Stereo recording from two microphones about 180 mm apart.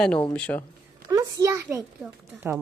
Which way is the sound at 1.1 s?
20° right (ahead or behind).